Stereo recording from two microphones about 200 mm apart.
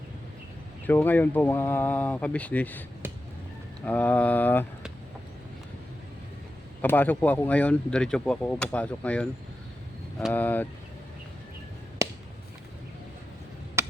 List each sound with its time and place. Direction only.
0.9 s speech: 10° left (ahead or behind)
3.0 s a sound: 10° right (ahead or behind)
3.8 s speech: 10° left (ahead or behind)
6.8 s speech: 10° left (ahead or behind)
12.0 s chop: 15° right (ahead or behind)
13.8 s chop: 15° right (ahead or behind)